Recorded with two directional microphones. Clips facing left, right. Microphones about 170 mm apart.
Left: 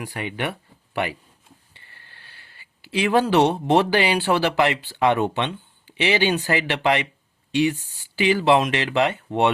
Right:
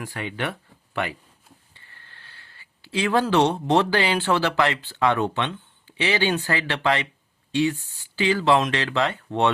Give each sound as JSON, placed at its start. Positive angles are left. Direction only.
{"t": 0.0, "sound": "speech", "side_deg": 15}
{"t": 1.7, "sound": "speech", "side_deg": 15}